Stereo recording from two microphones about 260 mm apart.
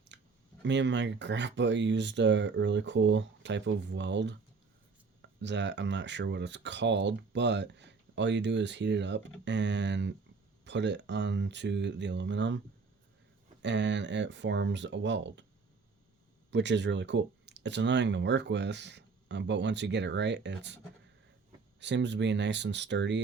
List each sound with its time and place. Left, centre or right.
0.1 s a sound: right
0.6 s speech: right
5.4 s speech: right
16.5 s speech: right
21.8 s speech: right